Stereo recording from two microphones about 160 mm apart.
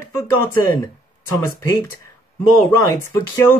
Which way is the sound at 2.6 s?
20° left (ahead or behind).